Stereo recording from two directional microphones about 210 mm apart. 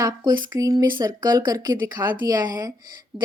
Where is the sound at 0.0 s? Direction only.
20° right (ahead or behind).